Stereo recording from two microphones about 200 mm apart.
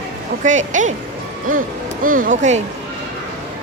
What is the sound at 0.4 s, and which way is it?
Speech, 40° right (ahead or behind).